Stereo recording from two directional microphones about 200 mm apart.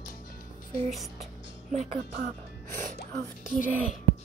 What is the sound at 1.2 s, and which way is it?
Music, 40° right (ahead or behind).